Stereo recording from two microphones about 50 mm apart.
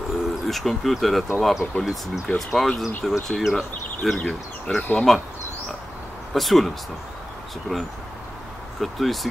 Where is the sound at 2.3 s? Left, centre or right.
Centre.